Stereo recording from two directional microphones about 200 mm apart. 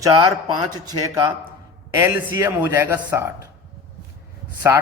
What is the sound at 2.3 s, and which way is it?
Speech, 10° right (ahead or behind).